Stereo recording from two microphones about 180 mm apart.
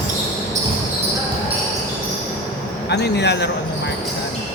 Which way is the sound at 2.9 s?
70° left (ahead or behind).